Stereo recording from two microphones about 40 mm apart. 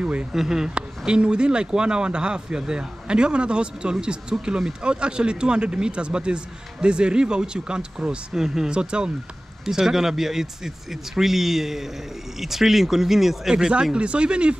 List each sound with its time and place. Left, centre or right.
0.0 s speech: right
0.3 s speech: centre
0.7 s speech: right
8.3 s speech: centre
8.6 s speech: right
9.7 s speech: centre
13.6 s speech: right